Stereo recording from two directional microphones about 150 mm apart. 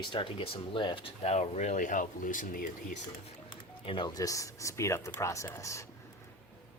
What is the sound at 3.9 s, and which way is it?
Speech, 30° left (ahead or behind).